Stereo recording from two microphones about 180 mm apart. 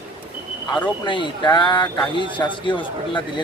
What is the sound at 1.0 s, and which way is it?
Speech, 25° left (ahead or behind).